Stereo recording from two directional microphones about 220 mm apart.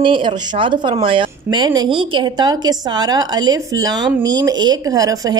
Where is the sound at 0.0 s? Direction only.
20° right (ahead or behind).